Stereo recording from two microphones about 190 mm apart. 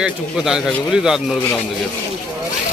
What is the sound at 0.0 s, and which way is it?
A man's voice, 5° right (ahead or behind).